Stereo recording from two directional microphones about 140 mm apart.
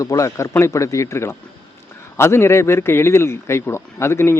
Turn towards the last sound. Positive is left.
turn(degrees=20)  # may be behind; listen again after turning